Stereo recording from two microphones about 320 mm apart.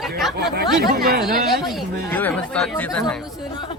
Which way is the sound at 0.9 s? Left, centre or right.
Right.